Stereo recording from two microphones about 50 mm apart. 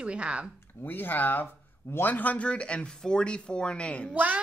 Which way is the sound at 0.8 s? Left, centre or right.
Left.